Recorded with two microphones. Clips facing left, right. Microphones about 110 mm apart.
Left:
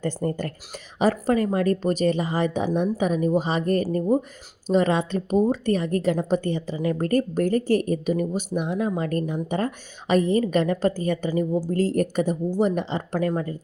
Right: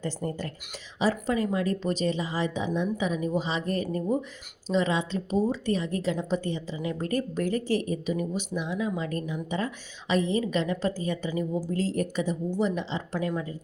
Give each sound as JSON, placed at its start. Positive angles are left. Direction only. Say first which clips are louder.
{"t": 0.0, "sound": "speech", "louder": "left 6 dB", "side_deg": 55}